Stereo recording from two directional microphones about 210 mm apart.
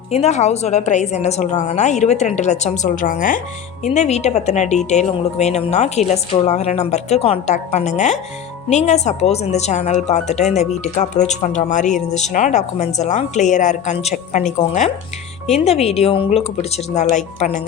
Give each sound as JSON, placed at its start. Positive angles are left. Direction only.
{"t": 0.1, "sound": "speech", "side_deg": 30}